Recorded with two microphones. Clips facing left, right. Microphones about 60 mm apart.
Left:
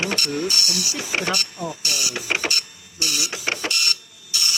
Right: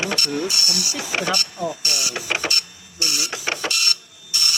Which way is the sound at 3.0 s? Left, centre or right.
Right.